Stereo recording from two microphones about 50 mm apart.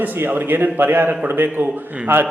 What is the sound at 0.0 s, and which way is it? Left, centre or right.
A man's voice, right.